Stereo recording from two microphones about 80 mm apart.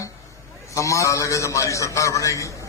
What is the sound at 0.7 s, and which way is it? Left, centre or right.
A man's voice, left.